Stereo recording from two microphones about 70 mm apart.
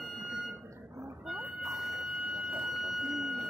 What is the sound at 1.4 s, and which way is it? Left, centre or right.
Vehicle, right.